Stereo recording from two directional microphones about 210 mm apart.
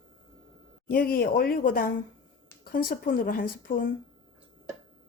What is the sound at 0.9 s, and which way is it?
Speech, 45° left (ahead or behind).